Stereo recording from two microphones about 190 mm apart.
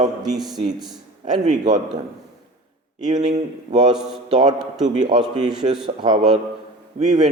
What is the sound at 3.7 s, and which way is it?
A man's voice, 25° right (ahead or behind).